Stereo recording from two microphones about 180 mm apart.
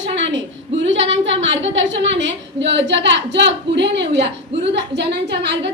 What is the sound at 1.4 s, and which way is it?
A woman's voice, 90° right.